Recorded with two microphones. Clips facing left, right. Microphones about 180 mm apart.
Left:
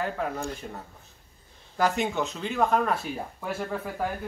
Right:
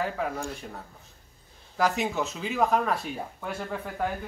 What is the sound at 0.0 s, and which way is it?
Speech, centre (ahead or behind).